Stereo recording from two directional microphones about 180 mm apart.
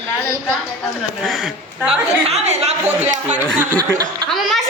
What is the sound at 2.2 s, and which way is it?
Speech, 35° right (ahead or behind).